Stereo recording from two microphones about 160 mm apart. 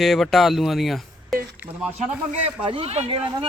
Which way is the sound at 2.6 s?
35° right (ahead or behind).